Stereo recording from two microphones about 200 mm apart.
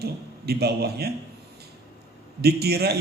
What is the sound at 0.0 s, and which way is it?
A man's voice, 55° right (ahead or behind).